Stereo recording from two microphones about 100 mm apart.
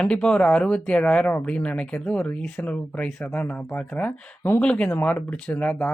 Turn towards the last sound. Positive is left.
turn(degrees=10)  # may be behind; listen again after turning